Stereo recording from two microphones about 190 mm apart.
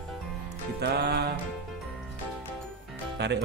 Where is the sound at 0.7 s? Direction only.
60° right (ahead or behind).